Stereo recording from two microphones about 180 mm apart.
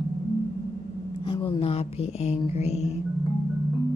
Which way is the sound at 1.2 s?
30° left (ahead or behind).